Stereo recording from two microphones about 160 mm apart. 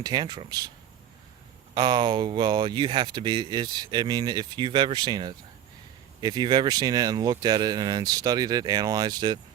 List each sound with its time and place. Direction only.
0.0 s speech: 25° right (ahead or behind)
1.7 s speech: 30° right (ahead or behind)